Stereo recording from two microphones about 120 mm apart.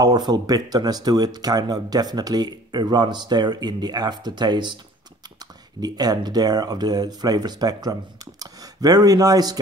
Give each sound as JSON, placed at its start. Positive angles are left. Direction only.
{"t": 0.0, "sound": "speech", "side_deg": -35}
{"t": 5.8, "sound": "speech", "side_deg": -35}